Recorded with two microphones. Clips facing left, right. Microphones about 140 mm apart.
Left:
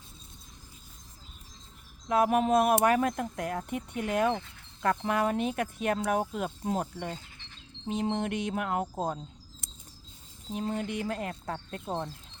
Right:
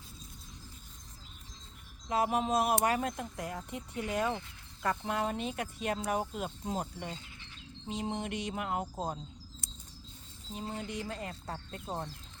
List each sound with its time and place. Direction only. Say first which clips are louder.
2.0 s speech: left 6 dB; 55° left (ahead or behind)
10.5 s speech: left 7 dB; 60° left (ahead or behind)